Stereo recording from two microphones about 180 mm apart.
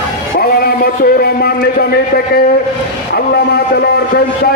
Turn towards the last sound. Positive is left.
turn(degrees=60)  # may be behind; listen again after turning